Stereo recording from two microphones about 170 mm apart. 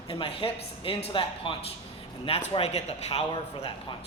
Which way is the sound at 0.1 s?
30° left (ahead or behind).